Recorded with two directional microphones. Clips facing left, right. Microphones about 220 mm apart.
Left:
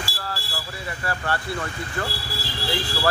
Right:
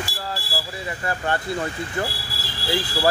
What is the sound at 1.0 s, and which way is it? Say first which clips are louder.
Speech: right 2 dB; 20° right (ahead or behind).